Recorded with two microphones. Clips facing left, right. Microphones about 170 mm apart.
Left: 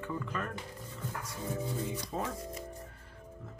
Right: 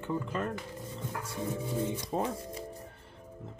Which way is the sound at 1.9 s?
30° right (ahead or behind).